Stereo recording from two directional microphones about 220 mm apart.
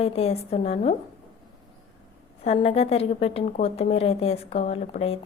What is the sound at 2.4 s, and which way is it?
A woman's voice, 25° left (ahead or behind).